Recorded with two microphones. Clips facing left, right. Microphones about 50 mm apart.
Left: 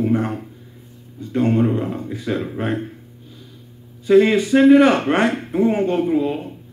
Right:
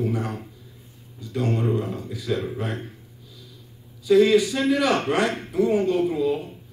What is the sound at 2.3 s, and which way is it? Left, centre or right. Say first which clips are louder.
Speech: left 1 dB; centre.